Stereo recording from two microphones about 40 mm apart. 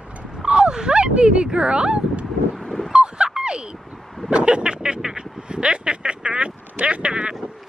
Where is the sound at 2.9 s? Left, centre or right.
Right.